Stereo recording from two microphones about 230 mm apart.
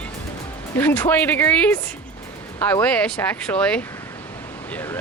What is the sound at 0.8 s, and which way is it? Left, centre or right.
Speech, centre.